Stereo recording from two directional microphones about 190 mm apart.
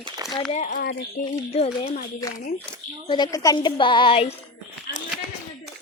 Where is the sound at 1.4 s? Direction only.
35° left (ahead or behind).